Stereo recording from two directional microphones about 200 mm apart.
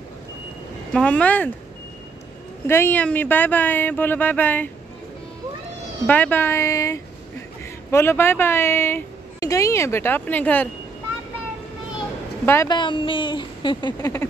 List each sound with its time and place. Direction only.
0.9 s speech: 5° left (ahead or behind)
2.6 s speech: 10° left (ahead or behind)
6.0 s speech: 10° left (ahead or behind)
12.4 s a woman's voice: 20° left (ahead or behind)